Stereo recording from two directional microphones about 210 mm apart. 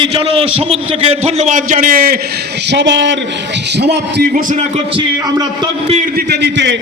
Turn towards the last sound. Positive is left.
turn(degrees=-55)  # may be behind; listen again after turning